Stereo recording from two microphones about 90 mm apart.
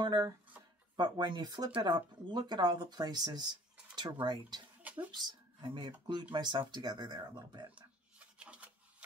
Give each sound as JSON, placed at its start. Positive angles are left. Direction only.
{"t": 0.0, "sound": "speech", "side_deg": -55}
{"t": 7.7, "sound": "rub", "side_deg": -15}